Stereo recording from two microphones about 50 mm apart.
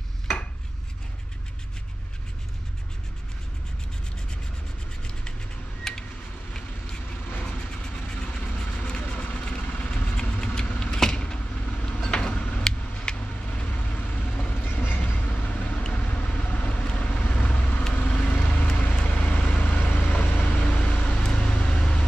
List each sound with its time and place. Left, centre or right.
5.9 s a sound: centre
7.4 s vehicle: centre
13.6 s vehicle: left
14.6 s vehicle: left